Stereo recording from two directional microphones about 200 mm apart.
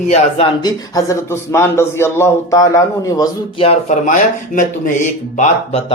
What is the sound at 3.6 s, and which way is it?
Speech, 35° left (ahead or behind).